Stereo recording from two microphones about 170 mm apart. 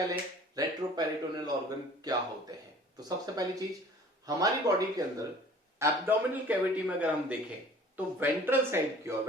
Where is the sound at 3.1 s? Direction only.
20° right (ahead or behind).